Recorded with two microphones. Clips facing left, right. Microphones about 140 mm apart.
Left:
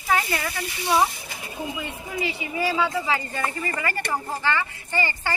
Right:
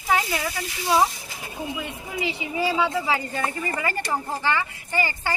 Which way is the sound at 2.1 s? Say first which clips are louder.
Right 1 dB; 20° right (ahead or behind).